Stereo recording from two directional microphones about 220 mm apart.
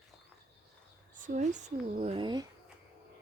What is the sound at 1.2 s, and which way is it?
Speech, 35° right (ahead or behind).